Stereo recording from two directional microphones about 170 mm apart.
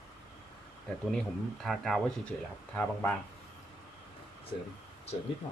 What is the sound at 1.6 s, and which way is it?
Speech, centre (ahead or behind).